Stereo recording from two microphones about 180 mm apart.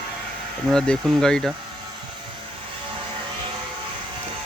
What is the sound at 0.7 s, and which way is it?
Speech, 5° left (ahead or behind).